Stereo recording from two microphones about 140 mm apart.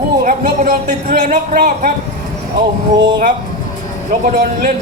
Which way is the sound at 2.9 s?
30° right (ahead or behind).